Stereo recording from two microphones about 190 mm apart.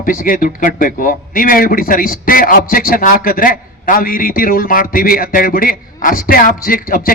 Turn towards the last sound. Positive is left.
turn(degrees=45)  # may be behind; listen again after turning